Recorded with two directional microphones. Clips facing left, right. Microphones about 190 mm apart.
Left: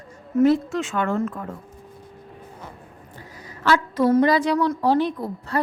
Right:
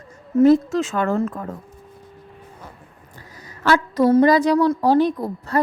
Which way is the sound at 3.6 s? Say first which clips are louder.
Right 2 dB; 45° right (ahead or behind).